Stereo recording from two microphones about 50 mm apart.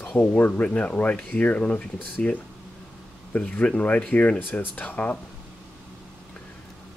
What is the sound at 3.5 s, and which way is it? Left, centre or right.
Speech, left.